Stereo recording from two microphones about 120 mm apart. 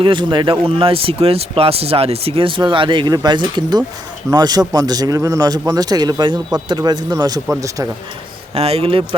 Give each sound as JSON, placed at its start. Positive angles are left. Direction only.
{"t": 0.0, "sound": "a man's voice", "side_deg": -40}
{"t": 8.5, "sound": "speech", "side_deg": -55}